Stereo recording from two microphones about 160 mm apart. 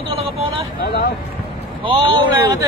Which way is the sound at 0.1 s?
35° right (ahead or behind).